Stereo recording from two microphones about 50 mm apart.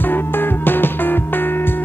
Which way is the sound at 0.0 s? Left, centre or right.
Left.